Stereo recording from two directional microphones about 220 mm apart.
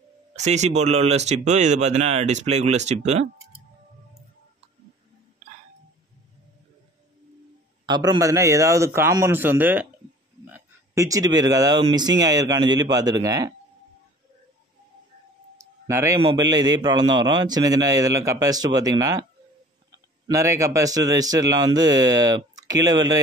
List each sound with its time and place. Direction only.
0.4 s speech: 30° right (ahead or behind)
7.8 s speech: 20° right (ahead or behind)
15.5 s a sound: 15° right (ahead or behind)
16.2 s speech: 20° right (ahead or behind)
20.2 s speech: 15° right (ahead or behind)